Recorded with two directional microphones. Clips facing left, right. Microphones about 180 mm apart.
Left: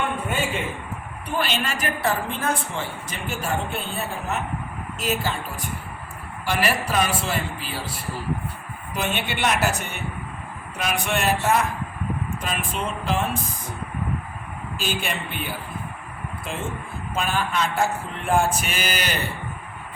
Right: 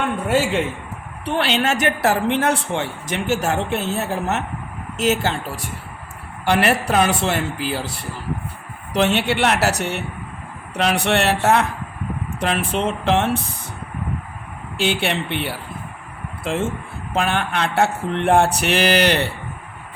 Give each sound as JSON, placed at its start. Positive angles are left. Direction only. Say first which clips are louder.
{"t": 0.3, "sound": "a woman's voice", "louder": "right 7 dB", "side_deg": -80}
{"t": 8.9, "sound": "speech", "louder": "right 8 dB", "side_deg": -75}
{"t": 14.8, "sound": "speech", "louder": "right 8 dB", "side_deg": -75}